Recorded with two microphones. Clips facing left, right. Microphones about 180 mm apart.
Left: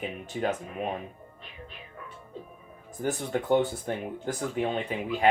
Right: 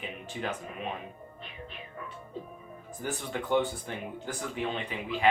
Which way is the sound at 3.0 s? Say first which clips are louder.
Left 6 dB; 45° left (ahead or behind).